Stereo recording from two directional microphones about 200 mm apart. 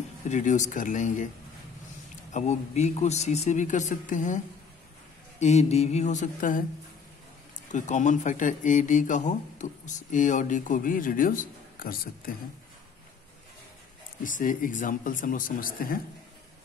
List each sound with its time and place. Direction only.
0.3 s a man's voice: 40° left (ahead or behind)
2.3 s a man's voice: 35° left (ahead or behind)
5.4 s a man's voice: 35° left (ahead or behind)
7.7 s a man's voice: 40° left (ahead or behind)
14.2 s speech: 40° left (ahead or behind)